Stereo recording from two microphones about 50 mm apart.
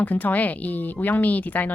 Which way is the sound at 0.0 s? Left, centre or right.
Left.